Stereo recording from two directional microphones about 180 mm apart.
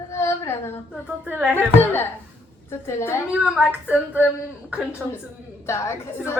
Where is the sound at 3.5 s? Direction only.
5° right (ahead or behind).